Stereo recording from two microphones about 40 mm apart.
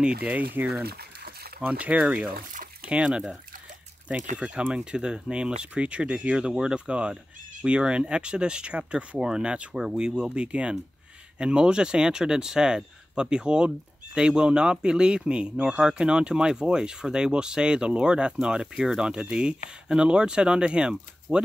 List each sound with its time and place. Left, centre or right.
0.0 s speech: right
1.7 s speech: right
4.1 s speech: right